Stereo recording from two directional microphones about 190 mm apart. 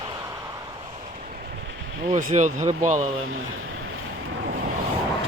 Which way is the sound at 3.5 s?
90° right.